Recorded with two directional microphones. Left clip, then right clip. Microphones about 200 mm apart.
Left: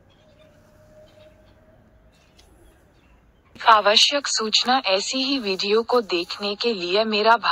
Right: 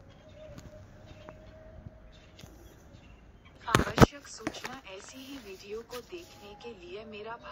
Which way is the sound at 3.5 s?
50° left (ahead or behind).